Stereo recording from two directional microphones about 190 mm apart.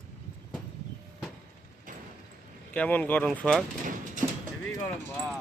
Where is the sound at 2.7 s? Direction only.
10° left (ahead or behind).